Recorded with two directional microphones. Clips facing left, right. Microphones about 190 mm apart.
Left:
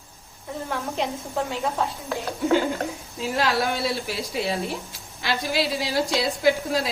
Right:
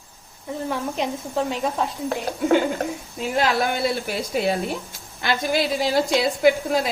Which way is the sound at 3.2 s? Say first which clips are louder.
Right 2 dB; 55° right (ahead or behind).